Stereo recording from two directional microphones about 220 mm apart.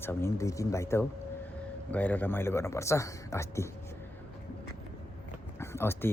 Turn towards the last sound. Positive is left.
turn(degrees=10)  # may be behind; listen again after turning